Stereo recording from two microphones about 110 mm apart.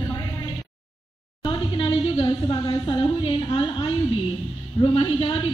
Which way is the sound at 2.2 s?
45° left (ahead or behind).